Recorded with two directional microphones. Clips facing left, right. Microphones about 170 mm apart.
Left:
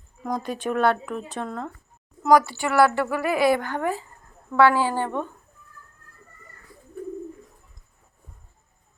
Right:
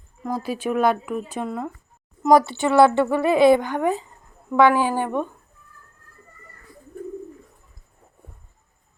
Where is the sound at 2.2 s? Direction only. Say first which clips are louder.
Right 2 dB; 25° right (ahead or behind).